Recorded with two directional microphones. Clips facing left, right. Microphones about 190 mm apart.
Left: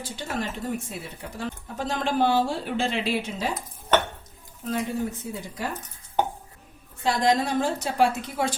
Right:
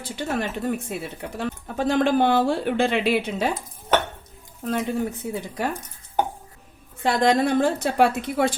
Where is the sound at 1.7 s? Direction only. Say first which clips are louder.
Right 6 dB; 60° right (ahead or behind).